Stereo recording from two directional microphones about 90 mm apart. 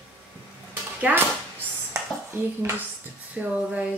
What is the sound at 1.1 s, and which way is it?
Speech, 15° right (ahead or behind).